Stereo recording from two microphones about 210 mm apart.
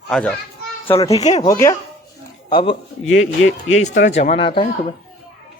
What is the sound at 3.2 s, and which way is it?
Speech, 65° left (ahead or behind).